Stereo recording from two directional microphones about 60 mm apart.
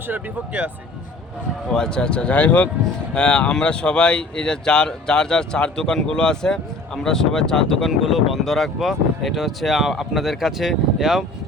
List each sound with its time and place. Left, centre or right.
0.1 s speech: right
1.7 s speech: centre